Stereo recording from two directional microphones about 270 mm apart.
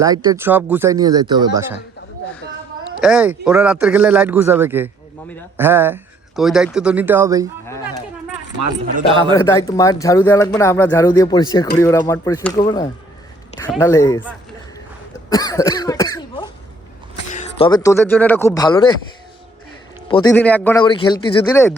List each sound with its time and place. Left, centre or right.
0.0 s speech: centre
3.0 s a man's voice: centre
9.3 s speech: centre
15.3 s cough: centre
17.3 s speech: centre
20.1 s a man's voice: centre
20.3 s a man's voice: centre
20.8 s speech: centre